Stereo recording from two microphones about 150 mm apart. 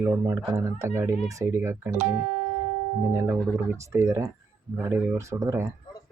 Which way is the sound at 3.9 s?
20° right (ahead or behind).